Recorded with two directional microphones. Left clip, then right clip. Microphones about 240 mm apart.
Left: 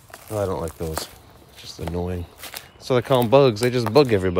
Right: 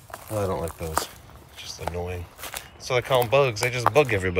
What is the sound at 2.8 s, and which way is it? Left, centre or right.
Speech, left.